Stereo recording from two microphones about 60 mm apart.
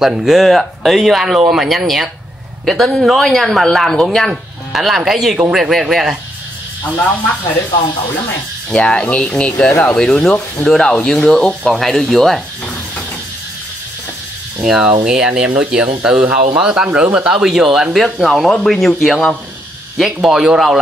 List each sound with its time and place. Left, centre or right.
0.2 s speech: centre
8.6 s speech: centre
14.9 s speech: centre
20.0 s speech: centre